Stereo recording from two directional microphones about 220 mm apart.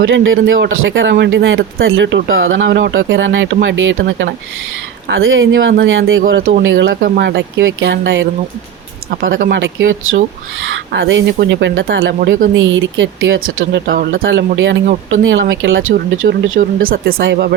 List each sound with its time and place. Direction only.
0.0 s speech: 60° right (ahead or behind)
9.2 s speech: 40° right (ahead or behind)
9.6 s speech: 60° right (ahead or behind)
13.8 s speech: 45° right (ahead or behind)